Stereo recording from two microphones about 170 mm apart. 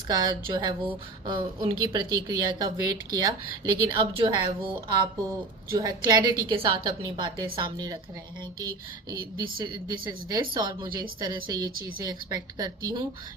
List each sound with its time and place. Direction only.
0.1 s a woman's voice: 25° right (ahead or behind)
9.1 s a woman's voice: 25° right (ahead or behind)